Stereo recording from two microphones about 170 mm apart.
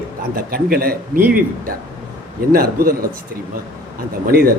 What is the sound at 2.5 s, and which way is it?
Speech, 60° right (ahead or behind).